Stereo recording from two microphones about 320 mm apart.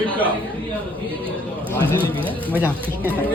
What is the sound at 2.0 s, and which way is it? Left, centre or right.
Speech, centre.